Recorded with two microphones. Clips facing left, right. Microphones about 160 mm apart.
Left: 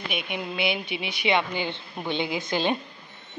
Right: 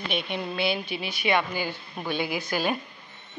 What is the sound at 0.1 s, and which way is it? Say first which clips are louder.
A woman's voice: right 2 dB; 10° left (ahead or behind).